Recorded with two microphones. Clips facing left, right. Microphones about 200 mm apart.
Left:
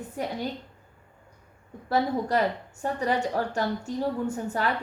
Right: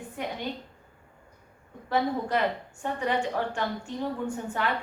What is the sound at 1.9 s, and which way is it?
A woman's voice, 40° left (ahead or behind).